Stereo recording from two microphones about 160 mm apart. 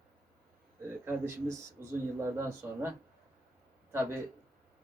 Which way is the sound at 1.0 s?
15° right (ahead or behind).